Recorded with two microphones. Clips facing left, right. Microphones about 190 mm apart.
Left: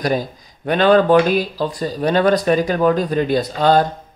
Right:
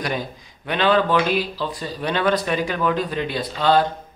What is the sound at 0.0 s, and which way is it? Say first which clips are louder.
Speech: left 6 dB; 40° left (ahead or behind).